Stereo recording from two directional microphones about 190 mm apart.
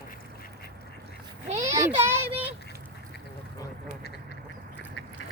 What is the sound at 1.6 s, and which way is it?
Child singing, 15° right (ahead or behind).